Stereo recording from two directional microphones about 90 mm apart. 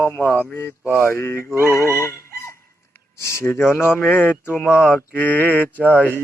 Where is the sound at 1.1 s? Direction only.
25° left (ahead or behind).